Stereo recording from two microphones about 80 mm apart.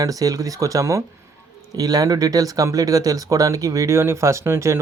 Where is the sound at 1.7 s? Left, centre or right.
Right.